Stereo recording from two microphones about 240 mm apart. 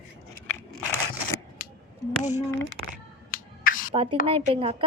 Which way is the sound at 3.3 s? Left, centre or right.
Left.